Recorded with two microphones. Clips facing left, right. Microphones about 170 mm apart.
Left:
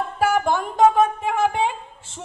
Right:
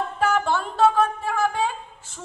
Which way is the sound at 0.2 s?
10° left (ahead or behind).